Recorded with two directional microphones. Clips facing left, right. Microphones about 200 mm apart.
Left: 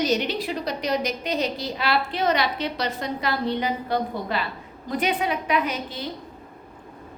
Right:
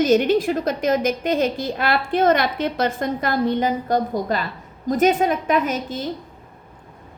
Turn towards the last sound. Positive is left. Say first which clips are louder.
# right 4 dB
turn(degrees=-45)  # may be behind; listen again after turning